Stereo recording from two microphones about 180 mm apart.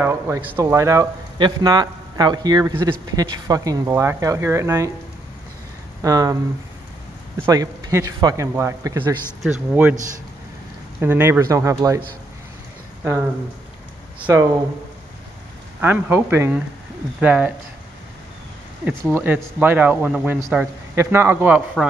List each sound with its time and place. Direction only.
0.0 s speech: 15° right (ahead or behind)
6.0 s speech: 20° right (ahead or behind)
7.4 s speech: 20° right (ahead or behind)
9.4 s a man's voice: 5° right (ahead or behind)
11.0 s speech: 10° right (ahead or behind)
14.2 s speech: 15° right (ahead or behind)
15.8 s speech: 10° right (ahead or behind)
18.9 s speech: 10° right (ahead or behind)